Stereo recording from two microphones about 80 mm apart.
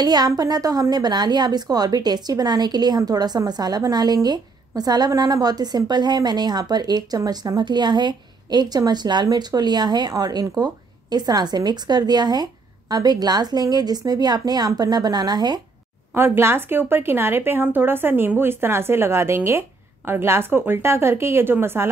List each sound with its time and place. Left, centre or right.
0.0 s a woman's voice: right
16.1 s a woman's voice: right